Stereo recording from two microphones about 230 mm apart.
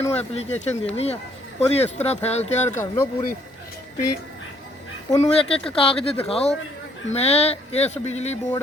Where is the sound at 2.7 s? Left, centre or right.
Centre.